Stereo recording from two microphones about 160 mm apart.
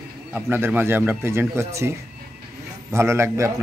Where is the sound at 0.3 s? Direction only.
10° right (ahead or behind).